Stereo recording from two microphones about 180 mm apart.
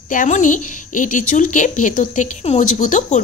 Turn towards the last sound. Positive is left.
turn(degrees=40)  # may be behind; listen again after turning